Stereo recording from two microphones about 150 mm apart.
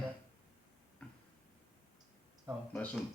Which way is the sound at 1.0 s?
5° left (ahead or behind).